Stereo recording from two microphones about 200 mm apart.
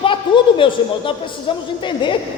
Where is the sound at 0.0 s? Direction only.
25° left (ahead or behind).